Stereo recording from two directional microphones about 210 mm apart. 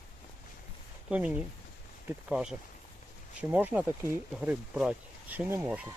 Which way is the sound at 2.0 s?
5° right (ahead or behind).